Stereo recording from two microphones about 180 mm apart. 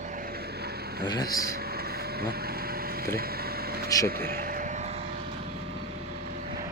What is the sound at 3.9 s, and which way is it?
Speech, 20° left (ahead or behind).